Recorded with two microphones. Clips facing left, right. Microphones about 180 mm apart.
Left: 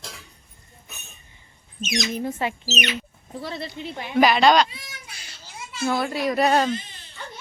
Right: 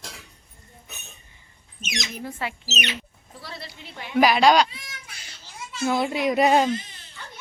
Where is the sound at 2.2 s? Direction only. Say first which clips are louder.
Left 5 dB; 20° left (ahead or behind).